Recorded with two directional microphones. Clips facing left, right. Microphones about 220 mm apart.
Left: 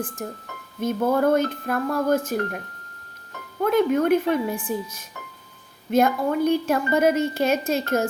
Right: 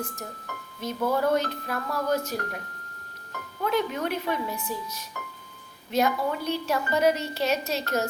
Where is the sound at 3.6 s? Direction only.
50° left (ahead or behind).